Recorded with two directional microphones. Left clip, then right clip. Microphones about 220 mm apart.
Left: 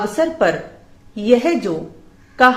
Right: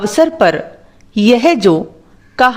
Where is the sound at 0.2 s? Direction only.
45° right (ahead or behind).